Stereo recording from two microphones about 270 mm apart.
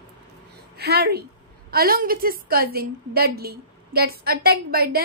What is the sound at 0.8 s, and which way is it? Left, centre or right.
A woman's voice, right.